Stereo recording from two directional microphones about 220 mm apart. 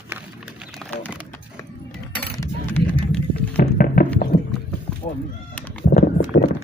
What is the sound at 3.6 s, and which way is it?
Music, 40° left (ahead or behind).